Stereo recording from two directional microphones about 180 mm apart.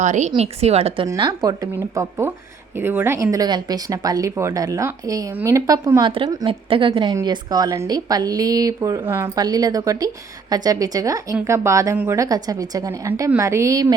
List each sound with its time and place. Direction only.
0.0 s speech: 40° right (ahead or behind)
1.0 s a woman's voice: 20° right (ahead or behind)